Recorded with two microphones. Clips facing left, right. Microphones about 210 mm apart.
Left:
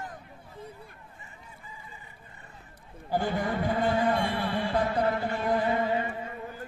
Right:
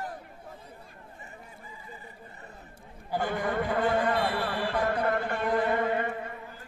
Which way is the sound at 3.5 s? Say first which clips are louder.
Right 1 dB; 65° right (ahead or behind).